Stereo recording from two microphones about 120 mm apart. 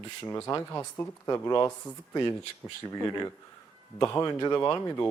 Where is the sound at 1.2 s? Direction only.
35° left (ahead or behind).